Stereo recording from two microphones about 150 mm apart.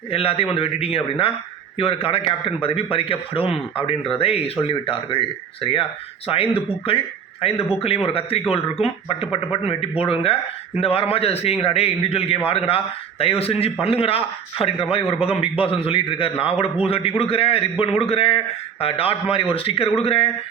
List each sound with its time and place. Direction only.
0.1 s a man's voice: 40° left (ahead or behind)
6.2 s a man's voice: 40° left (ahead or behind)